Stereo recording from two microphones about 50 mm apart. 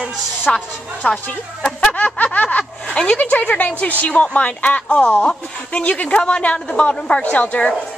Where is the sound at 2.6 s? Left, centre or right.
Centre.